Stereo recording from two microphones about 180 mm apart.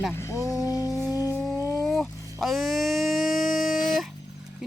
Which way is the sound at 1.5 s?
20° left (ahead or behind).